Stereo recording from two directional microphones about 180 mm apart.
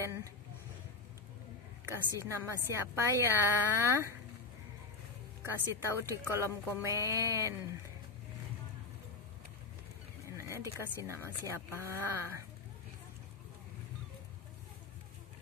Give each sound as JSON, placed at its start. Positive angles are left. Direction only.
{"t": 0.0, "sound": "speech", "side_deg": -15}
{"t": 1.9, "sound": "speech", "side_deg": -15}
{"t": 5.4, "sound": "speech", "side_deg": -15}
{"t": 10.2, "sound": "speech", "side_deg": -15}